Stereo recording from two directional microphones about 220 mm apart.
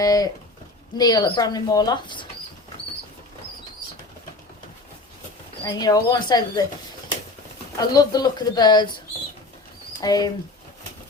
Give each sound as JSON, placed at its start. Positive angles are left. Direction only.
{"t": 0.0, "sound": "speech", "side_deg": 15}
{"t": 5.6, "sound": "speech", "side_deg": 20}
{"t": 7.8, "sound": "speech", "side_deg": 20}
{"t": 10.0, "sound": "speech", "side_deg": 15}